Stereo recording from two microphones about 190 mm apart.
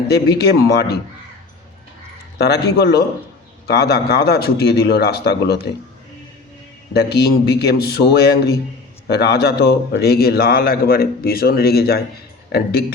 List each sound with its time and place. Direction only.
0.1 s a man's voice: 60° left (ahead or behind)
2.4 s a man's voice: 60° left (ahead or behind)
6.9 s a man's voice: 60° left (ahead or behind)